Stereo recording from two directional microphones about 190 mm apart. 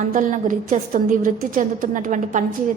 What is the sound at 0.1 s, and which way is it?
A woman's voice, 45° right (ahead or behind).